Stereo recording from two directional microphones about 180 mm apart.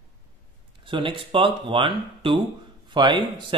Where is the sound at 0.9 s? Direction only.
25° right (ahead or behind).